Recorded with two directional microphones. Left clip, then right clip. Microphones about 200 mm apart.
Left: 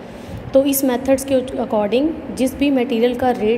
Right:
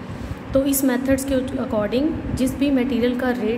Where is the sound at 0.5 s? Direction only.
15° left (ahead or behind).